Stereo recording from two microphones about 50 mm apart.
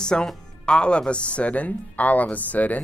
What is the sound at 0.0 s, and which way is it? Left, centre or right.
Speech, centre.